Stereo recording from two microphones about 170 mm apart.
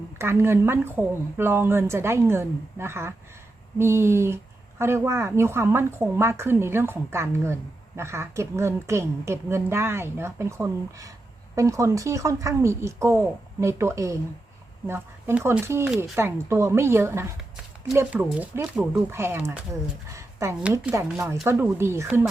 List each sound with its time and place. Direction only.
0.2 s a woman's voice: 15° right (ahead or behind)